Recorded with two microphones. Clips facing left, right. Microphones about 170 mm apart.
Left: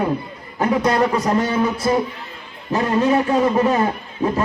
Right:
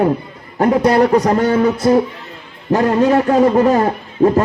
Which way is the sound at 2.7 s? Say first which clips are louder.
Right 4 dB; 70° right (ahead or behind).